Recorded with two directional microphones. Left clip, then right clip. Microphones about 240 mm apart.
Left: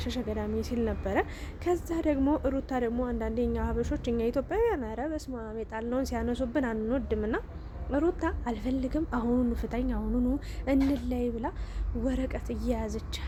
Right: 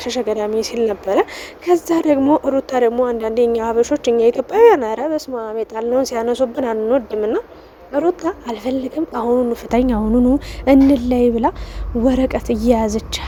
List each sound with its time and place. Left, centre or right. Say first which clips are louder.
0.0 s speech: right 15 dB; right